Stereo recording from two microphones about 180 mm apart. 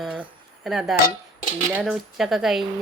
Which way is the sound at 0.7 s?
Centre (ahead or behind).